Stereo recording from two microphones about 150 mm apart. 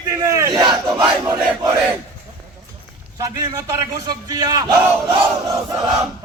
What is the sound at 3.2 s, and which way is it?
Speech, 20° right (ahead or behind).